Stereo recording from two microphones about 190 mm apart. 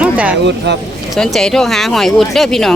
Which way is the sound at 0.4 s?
65° right (ahead or behind).